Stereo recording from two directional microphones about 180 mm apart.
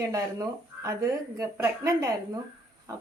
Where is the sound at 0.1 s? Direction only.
20° right (ahead or behind).